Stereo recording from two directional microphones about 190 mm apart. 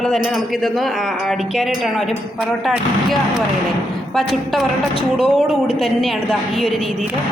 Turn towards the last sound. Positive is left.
turn(degrees=0)  # may be behind; listen again after turning